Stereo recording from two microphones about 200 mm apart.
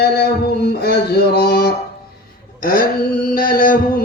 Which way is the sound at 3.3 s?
45° left (ahead or behind).